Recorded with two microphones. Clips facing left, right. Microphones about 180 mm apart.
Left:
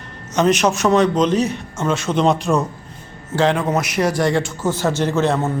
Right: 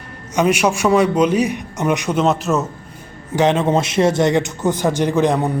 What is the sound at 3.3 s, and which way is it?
A man's voice, 20° right (ahead or behind).